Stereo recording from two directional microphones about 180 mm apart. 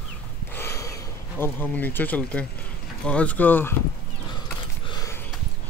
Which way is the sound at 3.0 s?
5° left (ahead or behind).